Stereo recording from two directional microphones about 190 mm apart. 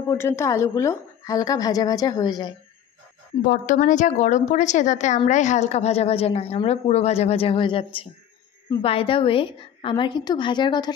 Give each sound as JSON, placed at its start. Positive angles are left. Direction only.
{"t": 0.1, "sound": "a woman's voice", "side_deg": 15}
{"t": 3.4, "sound": "a woman's voice", "side_deg": 40}